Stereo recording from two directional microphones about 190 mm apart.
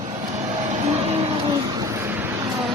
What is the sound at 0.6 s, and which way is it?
Vehicle, 35° right (ahead or behind).